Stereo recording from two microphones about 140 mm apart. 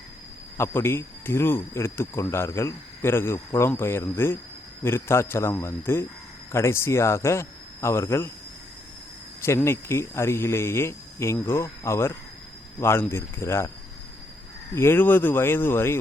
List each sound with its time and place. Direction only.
0.5 s speech: 20° left (ahead or behind)
9.6 s speech: 20° left (ahead or behind)
14.8 s speech: 15° left (ahead or behind)